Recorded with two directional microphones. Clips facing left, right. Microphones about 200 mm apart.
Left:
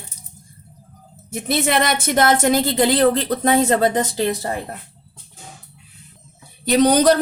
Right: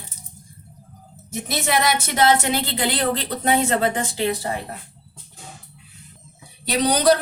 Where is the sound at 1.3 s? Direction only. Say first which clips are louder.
Left 4 dB; 55° left (ahead or behind); by 4.0 s 40° left (ahead or behind).